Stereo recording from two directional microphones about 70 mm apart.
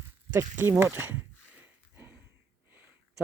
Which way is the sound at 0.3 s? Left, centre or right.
Right.